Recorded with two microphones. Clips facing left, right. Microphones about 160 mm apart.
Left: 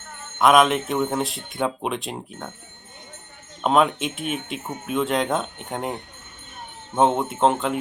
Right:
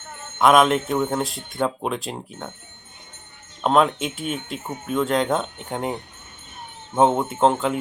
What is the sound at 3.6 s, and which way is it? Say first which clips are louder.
Speech: right 1 dB; centre (ahead or behind).